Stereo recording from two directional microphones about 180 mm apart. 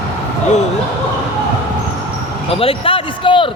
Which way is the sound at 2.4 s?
30° left (ahead or behind).